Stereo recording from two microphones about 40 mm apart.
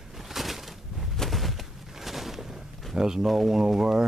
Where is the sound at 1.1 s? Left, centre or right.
Centre.